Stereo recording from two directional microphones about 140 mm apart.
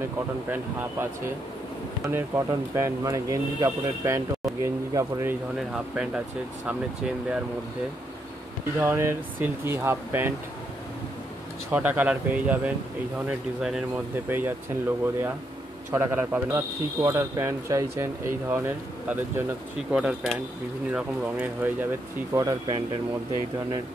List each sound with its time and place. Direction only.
0.5 s speech: 15° right (ahead or behind)
5.7 s speech: 5° right (ahead or behind)
8.7 s speech: 20° right (ahead or behind)
11.7 s speech: 10° right (ahead or behind)
19.9 s speech: 5° right (ahead or behind)
22.3 s speech: 25° right (ahead or behind)